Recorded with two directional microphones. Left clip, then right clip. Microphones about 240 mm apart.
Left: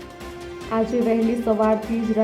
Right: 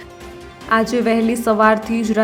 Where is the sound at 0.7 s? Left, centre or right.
Centre.